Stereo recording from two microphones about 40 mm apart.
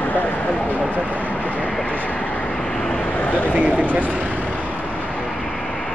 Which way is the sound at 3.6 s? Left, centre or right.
Right.